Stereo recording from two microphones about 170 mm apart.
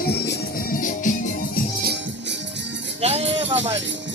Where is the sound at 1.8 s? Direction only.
90° right.